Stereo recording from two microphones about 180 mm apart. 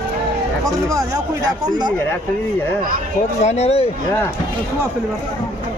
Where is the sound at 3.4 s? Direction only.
35° left (ahead or behind).